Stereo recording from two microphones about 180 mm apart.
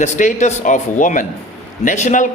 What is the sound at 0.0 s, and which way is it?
A man's voice, 40° left (ahead or behind).